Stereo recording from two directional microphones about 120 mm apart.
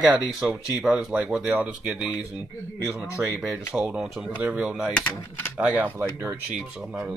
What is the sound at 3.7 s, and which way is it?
Speech, 5° right (ahead or behind).